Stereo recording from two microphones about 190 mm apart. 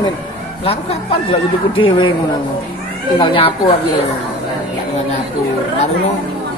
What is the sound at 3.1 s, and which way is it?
Speech, 25° left (ahead or behind).